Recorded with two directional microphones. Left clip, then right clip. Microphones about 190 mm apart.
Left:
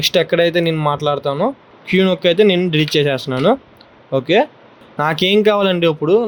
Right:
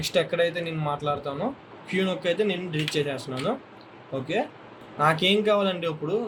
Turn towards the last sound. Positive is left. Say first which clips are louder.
# left 13 dB
turn(degrees=55)  # may be behind; listen again after turning